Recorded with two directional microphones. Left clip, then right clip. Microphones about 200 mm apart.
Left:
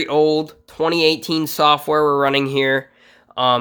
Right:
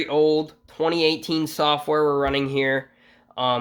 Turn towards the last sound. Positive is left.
turn(degrees=25)  # may be behind; listen again after turning